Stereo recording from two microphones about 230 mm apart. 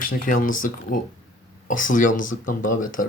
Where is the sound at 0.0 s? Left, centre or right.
Left.